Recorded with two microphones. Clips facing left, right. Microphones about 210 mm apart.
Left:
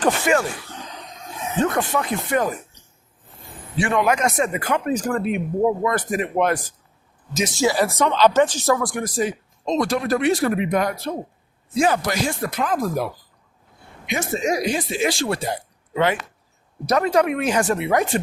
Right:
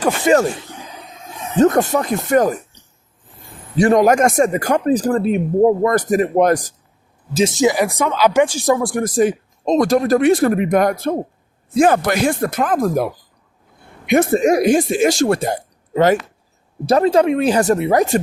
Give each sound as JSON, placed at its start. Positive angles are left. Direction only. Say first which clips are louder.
{"t": 0.3, "sound": "speech", "louder": "right 8 dB", "side_deg": -30}
{"t": 0.7, "sound": "a sound", "louder": "right 2 dB", "side_deg": -10}
{"t": 1.5, "sound": "speech", "louder": "right 8 dB", "side_deg": -40}
{"t": 7.3, "sound": "speech", "louder": "right 5 dB", "side_deg": -25}
{"t": 9.0, "sound": "speech", "louder": "right 7 dB", "side_deg": -50}
{"t": 16.8, "sound": "speech", "louder": "right 5 dB", "side_deg": -30}